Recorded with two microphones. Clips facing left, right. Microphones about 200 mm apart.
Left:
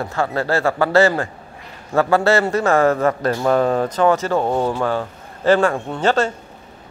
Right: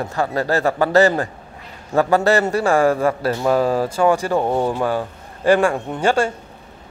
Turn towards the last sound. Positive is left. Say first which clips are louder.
# even
turn(degrees=-10)  # may be behind; listen again after turning